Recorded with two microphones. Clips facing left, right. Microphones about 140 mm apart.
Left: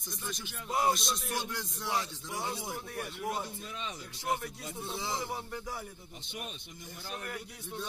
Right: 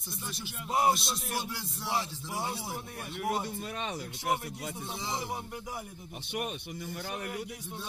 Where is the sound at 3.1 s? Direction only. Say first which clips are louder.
Right 7 dB; 65° right (ahead or behind).